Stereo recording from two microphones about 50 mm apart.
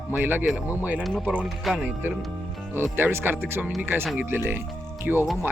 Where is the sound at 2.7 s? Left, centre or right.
Right.